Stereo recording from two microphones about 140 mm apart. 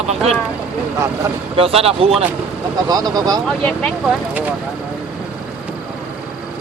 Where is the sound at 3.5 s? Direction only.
5° left (ahead or behind).